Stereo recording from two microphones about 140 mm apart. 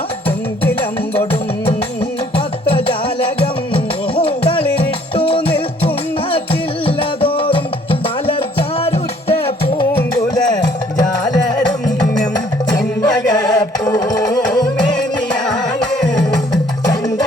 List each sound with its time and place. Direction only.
2.3 s music: 40° left (ahead or behind)
4.1 s music: 40° left (ahead or behind)
10.3 s music: 30° left (ahead or behind)
13.0 s music: 30° left (ahead or behind)